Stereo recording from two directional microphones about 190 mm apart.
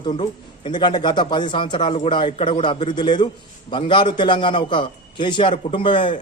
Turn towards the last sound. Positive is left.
turn(degrees=25)  # may be behind; listen again after turning